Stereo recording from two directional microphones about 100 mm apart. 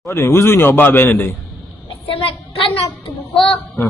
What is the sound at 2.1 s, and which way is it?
Speech, 65° left (ahead or behind).